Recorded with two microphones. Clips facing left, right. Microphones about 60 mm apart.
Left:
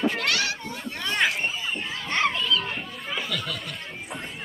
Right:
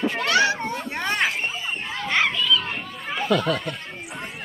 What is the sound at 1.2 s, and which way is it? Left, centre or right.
Children playing, centre.